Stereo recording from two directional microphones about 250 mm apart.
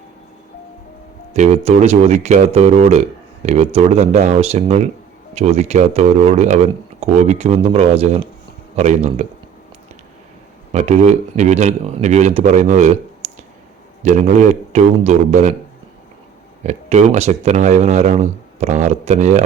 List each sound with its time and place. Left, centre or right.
1.3 s speech: right
10.7 s speech: right
14.0 s speech: right
16.6 s speech: right